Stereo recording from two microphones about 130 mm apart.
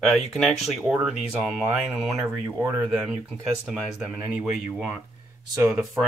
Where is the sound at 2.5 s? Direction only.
15° right (ahead or behind).